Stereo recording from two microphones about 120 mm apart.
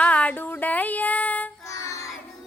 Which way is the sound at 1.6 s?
25° left (ahead or behind).